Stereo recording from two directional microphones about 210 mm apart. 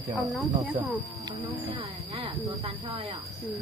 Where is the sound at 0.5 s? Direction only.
25° right (ahead or behind).